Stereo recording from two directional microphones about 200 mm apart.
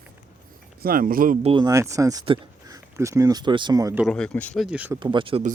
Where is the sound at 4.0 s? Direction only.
Centre (ahead or behind).